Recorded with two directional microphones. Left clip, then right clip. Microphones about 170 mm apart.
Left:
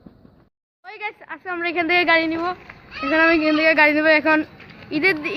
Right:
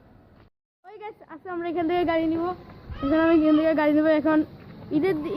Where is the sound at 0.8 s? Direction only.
Centre (ahead or behind).